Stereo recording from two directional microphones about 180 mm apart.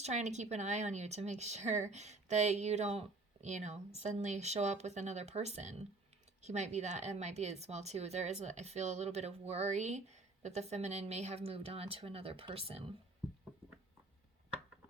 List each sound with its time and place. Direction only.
0.0 s a woman's voice: 40° right (ahead or behind)